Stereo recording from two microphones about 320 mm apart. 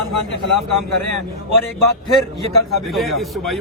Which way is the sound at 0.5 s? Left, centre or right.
Left.